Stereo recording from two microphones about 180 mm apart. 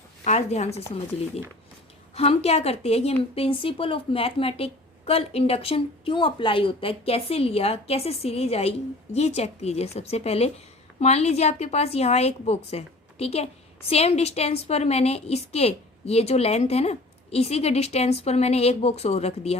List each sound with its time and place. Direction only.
0.3 s a woman's voice: 40° left (ahead or behind)
2.1 s a woman's voice: 35° left (ahead or behind)